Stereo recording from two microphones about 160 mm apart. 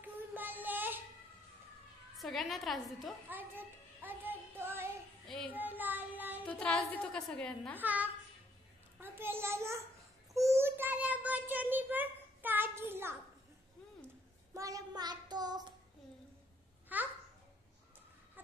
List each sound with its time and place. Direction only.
0.0 s child singing: 10° right (ahead or behind)
2.1 s a woman's voice: centre (ahead or behind)
3.3 s child singing: 10° right (ahead or behind)
5.2 s child singing: centre (ahead or behind)
5.5 s child singing: 10° right (ahead or behind)
6.4 s a woman's voice: 5° left (ahead or behind)
7.8 s a child's voice: 10° right (ahead or behind)
10.3 s child singing: 20° right (ahead or behind)
14.5 s child singing: 20° right (ahead or behind)
16.9 s babbling: 10° right (ahead or behind)